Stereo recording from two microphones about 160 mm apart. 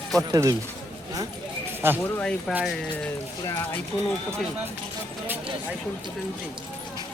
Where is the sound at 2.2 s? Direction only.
5° left (ahead or behind).